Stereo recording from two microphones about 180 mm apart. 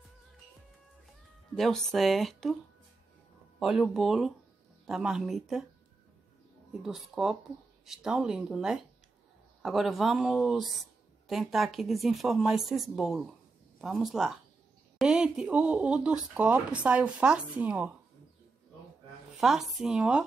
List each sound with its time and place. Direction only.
1.5 s speech: 5° left (ahead or behind)
3.5 s speech: centre (ahead or behind)
6.7 s speech: centre (ahead or behind)
19.3 s speech: centre (ahead or behind)